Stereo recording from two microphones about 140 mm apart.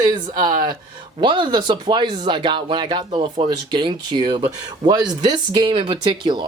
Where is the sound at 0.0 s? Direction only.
30° right (ahead or behind).